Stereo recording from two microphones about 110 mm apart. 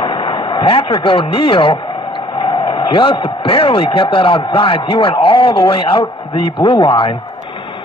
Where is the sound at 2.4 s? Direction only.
50° left (ahead or behind).